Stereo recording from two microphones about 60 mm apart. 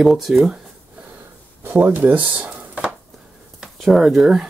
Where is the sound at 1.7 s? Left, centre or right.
Right.